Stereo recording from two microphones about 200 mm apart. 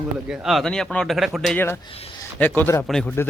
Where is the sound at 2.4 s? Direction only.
10° left (ahead or behind).